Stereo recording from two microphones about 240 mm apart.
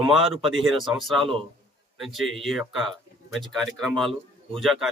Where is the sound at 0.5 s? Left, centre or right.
Centre.